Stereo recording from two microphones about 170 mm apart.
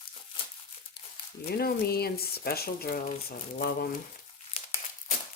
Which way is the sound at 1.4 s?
65° left (ahead or behind).